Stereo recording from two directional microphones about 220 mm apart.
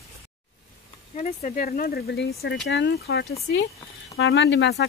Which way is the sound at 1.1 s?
35° left (ahead or behind).